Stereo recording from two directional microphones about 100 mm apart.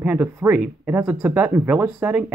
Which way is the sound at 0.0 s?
15° right (ahead or behind).